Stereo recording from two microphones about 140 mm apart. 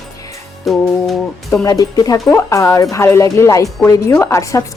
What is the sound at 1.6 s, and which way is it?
A woman's voice, 25° left (ahead or behind).